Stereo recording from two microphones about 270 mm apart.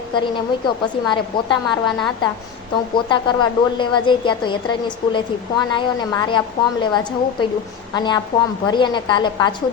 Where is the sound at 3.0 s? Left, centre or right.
Centre.